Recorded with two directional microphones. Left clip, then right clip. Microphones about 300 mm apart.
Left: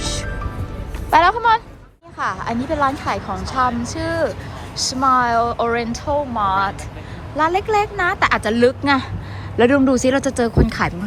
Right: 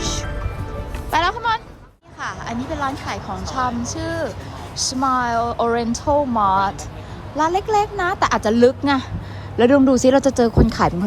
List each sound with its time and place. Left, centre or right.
0.0 s music: centre
1.1 s a woman's voice: centre